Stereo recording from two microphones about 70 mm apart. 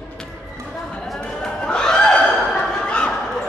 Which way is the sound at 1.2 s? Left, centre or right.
Centre.